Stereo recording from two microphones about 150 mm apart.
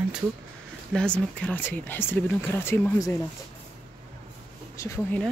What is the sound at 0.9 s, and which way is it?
Speech, 5° left (ahead or behind).